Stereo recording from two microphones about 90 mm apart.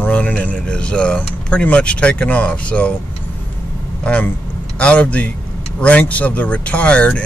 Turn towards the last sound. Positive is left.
turn(degrees=15)  # may be behind; listen again after turning